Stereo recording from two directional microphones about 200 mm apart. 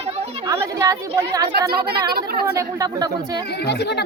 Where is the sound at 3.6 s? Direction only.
55° left (ahead or behind).